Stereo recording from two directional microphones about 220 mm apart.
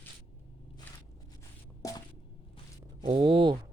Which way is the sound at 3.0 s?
25° right (ahead or behind).